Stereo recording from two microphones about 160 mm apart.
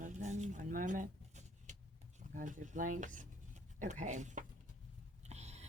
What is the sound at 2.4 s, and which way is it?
Speech, 55° right (ahead or behind).